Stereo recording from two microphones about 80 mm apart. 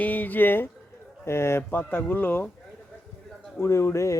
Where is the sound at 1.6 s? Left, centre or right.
Left.